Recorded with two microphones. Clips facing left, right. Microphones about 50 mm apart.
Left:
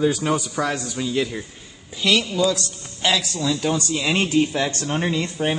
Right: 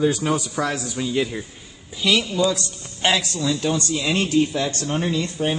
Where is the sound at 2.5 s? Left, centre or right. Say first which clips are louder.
Left 1 dB; right.